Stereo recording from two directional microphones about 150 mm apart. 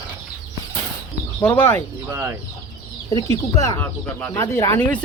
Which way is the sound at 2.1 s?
20° right (ahead or behind).